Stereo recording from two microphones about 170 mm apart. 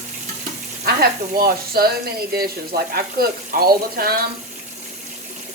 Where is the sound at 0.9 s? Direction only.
60° right (ahead or behind).